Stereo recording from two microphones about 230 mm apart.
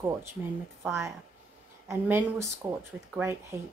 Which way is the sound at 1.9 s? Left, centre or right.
Centre.